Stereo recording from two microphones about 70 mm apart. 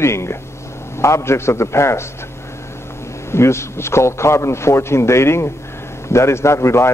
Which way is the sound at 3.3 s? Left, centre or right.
Left.